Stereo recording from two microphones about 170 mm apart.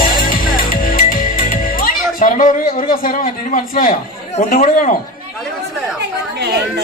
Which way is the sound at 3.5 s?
55° left (ahead or behind).